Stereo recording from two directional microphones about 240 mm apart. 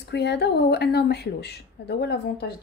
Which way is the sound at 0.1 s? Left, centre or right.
Left.